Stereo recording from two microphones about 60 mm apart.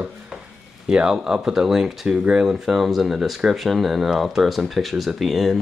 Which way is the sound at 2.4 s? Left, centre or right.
Centre.